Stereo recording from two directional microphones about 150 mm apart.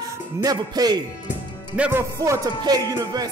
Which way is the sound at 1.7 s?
10° right (ahead or behind).